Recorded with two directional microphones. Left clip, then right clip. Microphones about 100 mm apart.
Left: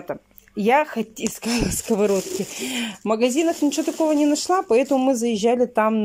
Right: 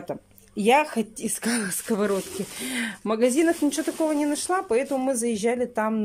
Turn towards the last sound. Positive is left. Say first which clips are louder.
# left 6 dB
turn(degrees=10)  # may be behind; listen again after turning